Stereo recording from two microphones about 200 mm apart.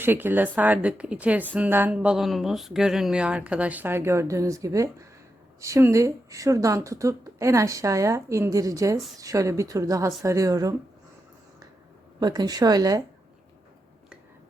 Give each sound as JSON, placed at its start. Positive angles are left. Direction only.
{"t": 0.0, "sound": "speech", "side_deg": -10}
{"t": 12.2, "sound": "speech", "side_deg": -20}